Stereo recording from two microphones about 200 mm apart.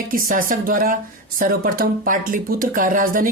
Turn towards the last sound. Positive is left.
turn(degrees=-45)  # may be behind; listen again after turning